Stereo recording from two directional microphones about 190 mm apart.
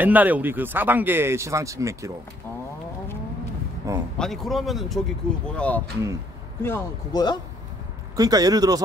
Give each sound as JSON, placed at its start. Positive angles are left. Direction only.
{"t": 0.0, "sound": "speech", "side_deg": -10}
{"t": 3.9, "sound": "speech", "side_deg": -15}
{"t": 4.2, "sound": "speech", "side_deg": 0}
{"t": 8.2, "sound": "speech", "side_deg": -20}